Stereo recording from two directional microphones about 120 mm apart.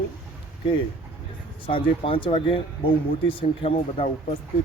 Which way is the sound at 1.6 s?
45° left (ahead or behind).